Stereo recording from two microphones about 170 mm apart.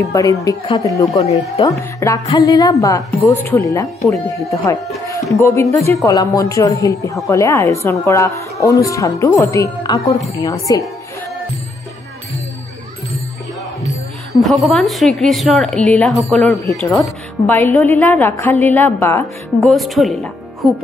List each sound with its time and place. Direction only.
0.0 s speech: 20° left (ahead or behind)
1.1 s speech: 40° left (ahead or behind)
1.6 s a woman's voice: 20° left (ahead or behind)
14.3 s a woman's voice: centre (ahead or behind)
19.6 s a woman's voice: centre (ahead or behind)